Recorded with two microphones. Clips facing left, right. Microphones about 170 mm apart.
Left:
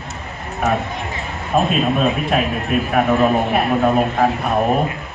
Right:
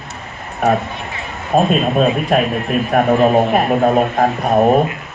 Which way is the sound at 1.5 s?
40° right (ahead or behind).